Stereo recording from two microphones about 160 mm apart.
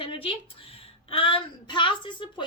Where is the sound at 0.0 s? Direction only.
35° left (ahead or behind).